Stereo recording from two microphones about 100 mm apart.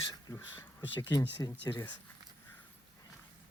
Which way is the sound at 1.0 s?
40° left (ahead or behind).